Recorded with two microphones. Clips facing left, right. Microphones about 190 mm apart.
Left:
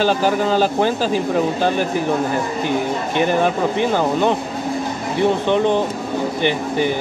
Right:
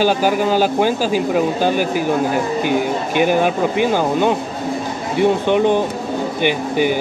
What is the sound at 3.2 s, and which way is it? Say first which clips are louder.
Speech: right 2 dB; 10° right (ahead or behind).